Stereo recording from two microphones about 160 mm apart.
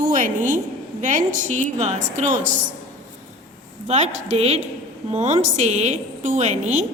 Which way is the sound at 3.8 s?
45° right (ahead or behind).